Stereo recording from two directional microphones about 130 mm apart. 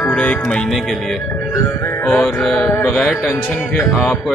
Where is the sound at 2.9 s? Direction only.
5° left (ahead or behind).